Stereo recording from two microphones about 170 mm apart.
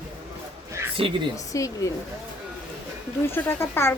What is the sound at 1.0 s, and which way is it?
Speech, 35° right (ahead or behind).